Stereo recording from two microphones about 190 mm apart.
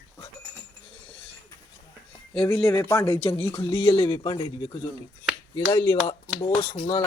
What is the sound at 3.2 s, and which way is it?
A man's voice, 30° left (ahead or behind).